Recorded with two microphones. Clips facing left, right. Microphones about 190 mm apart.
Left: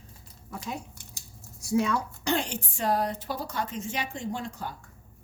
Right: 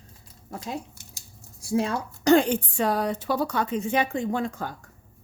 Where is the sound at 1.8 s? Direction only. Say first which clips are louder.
Even; 30° right (ahead or behind).